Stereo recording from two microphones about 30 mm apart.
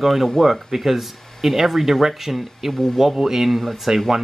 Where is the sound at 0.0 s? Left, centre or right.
Centre.